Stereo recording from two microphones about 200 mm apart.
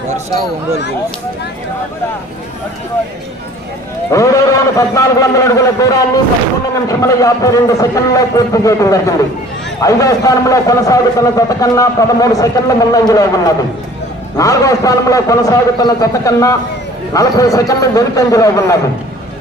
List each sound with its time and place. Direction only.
4.1 s a man's voice: 15° left (ahead or behind)